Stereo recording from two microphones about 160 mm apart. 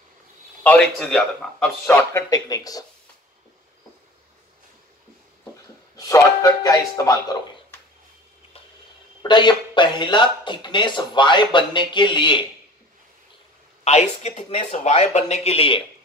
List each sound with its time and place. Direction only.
0.7 s speech: 5° left (ahead or behind)
2.1 s speech: 20° left (ahead or behind)
5.9 s speech: 20° left (ahead or behind)
9.2 s speech: 30° left (ahead or behind)
13.8 s speech: 45° left (ahead or behind)